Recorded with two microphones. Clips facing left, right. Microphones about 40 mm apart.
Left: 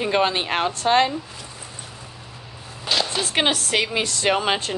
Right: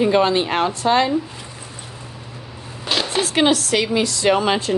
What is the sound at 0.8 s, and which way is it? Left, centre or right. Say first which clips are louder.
Speech: even; left.